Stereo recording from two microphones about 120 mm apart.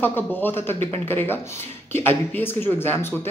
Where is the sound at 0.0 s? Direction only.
15° left (ahead or behind).